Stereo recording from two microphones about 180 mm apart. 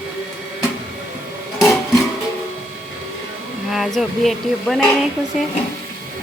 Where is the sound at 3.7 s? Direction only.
Centre (ahead or behind).